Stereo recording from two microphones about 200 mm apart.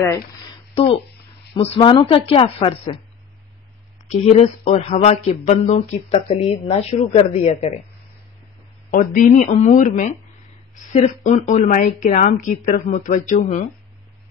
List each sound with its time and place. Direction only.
1.5 s speech: 30° left (ahead or behind)
4.1 s speech: 30° left (ahead or behind)
8.9 s speech: 40° left (ahead or behind)